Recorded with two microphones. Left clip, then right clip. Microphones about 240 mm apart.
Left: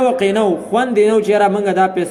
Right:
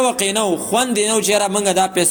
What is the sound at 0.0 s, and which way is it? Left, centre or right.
A man's voice, right.